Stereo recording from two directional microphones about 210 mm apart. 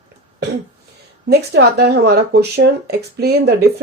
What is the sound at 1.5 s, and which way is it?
Speech, 50° right (ahead or behind).